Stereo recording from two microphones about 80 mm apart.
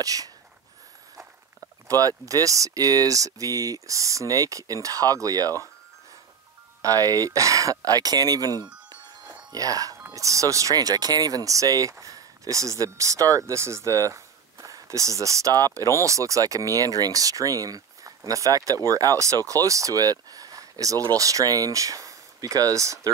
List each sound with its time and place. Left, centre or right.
0.0 s speech: right
1.9 s speech: right
6.8 s speech: right